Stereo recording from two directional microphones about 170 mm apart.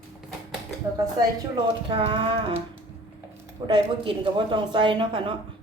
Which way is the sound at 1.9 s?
30° right (ahead or behind).